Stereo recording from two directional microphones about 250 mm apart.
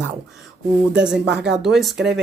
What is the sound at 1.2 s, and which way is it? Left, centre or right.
Speech, right.